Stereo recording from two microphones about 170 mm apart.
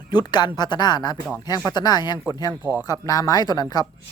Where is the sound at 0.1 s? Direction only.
25° left (ahead or behind).